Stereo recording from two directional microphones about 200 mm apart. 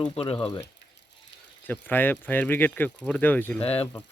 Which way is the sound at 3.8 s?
10° left (ahead or behind).